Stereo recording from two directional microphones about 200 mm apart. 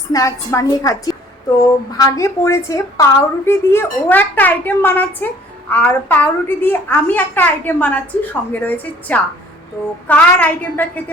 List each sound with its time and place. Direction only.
0.1 s a woman's voice: 15° left (ahead or behind)